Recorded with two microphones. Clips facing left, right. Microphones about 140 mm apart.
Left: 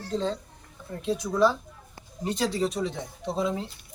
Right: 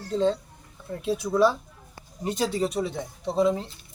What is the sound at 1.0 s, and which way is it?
Speech, 5° right (ahead or behind).